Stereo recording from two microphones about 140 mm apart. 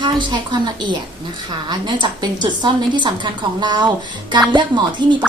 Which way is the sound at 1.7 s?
30° right (ahead or behind).